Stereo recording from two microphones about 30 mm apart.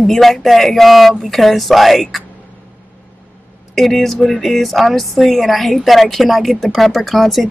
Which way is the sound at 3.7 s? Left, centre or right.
Centre.